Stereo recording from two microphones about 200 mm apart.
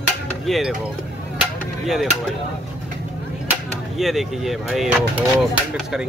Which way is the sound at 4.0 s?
Centre (ahead or behind).